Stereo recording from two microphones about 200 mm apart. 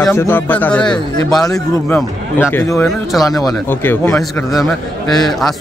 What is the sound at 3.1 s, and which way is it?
Speech, centre (ahead or behind).